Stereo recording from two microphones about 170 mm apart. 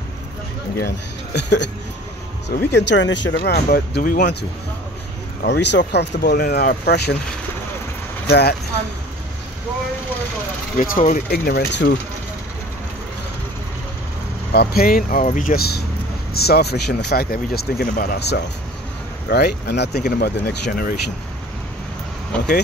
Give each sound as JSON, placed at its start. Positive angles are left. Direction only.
{"t": 0.7, "sound": "a man's voice", "side_deg": 75}
{"t": 2.7, "sound": "speech", "side_deg": 90}
{"t": 5.4, "sound": "speech", "side_deg": 85}
{"t": 8.3, "sound": "speech", "side_deg": 75}
{"t": 10.8, "sound": "speech", "side_deg": 55}
{"t": 14.5, "sound": "speech", "side_deg": 65}
{"t": 22.3, "sound": "speech", "side_deg": 5}